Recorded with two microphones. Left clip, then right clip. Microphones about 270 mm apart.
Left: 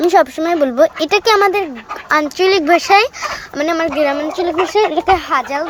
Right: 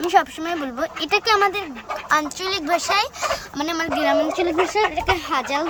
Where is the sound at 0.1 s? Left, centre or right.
Left.